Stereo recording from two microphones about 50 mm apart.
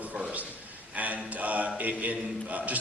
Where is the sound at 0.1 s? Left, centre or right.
Right.